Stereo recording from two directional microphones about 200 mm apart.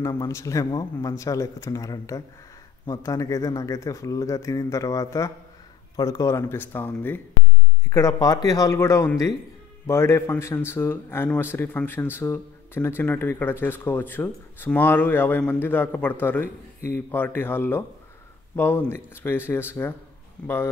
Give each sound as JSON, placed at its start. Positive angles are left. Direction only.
{"t": 0.0, "sound": "speech", "side_deg": 15}